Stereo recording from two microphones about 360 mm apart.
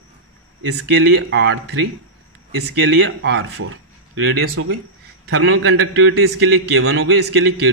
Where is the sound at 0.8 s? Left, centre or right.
Right.